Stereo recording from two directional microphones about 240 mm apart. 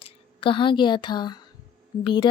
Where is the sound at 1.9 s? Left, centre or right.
Centre.